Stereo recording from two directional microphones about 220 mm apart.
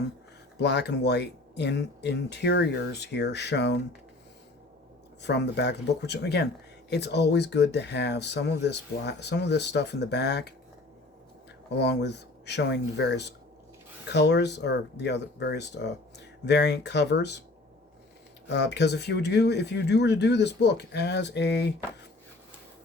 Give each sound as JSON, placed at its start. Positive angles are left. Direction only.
{"t": 0.6, "sound": "speech", "side_deg": 50}
{"t": 5.2, "sound": "speech", "side_deg": 50}
{"t": 11.7, "sound": "speech", "side_deg": 50}
{"t": 18.4, "sound": "speech", "side_deg": 50}